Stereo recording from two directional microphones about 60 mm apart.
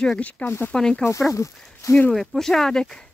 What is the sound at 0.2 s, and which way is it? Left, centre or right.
Speech, left.